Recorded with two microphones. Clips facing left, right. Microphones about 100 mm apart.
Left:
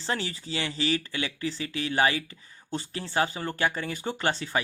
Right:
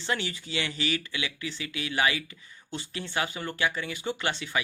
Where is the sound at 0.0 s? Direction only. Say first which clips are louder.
Even; 35° left (ahead or behind).